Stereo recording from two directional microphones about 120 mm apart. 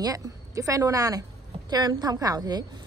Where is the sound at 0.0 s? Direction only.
30° right (ahead or behind).